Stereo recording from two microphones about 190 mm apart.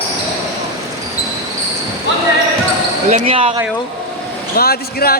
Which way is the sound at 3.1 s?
35° right (ahead or behind).